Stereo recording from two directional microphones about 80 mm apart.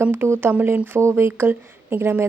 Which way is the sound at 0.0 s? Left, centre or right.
Right.